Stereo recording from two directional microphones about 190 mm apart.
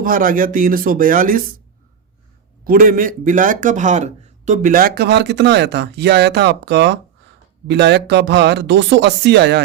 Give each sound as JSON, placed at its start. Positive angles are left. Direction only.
{"t": 0.0, "sound": "speech", "side_deg": -45}
{"t": 2.6, "sound": "speech", "side_deg": -50}